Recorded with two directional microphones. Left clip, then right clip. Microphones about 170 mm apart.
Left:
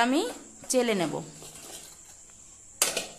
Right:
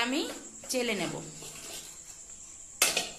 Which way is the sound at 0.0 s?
55° left (ahead or behind).